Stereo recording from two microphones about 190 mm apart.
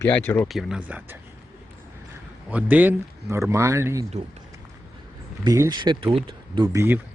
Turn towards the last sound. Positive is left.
turn(degrees=-25)  # may be behind; listen again after turning